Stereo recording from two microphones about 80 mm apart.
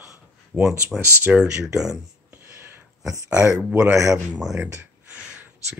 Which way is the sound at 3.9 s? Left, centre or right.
Right.